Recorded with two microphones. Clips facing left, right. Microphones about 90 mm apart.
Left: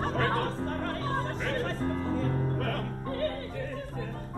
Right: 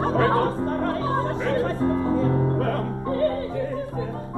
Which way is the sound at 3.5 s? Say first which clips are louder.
Right 9 dB; 55° left (ahead or behind).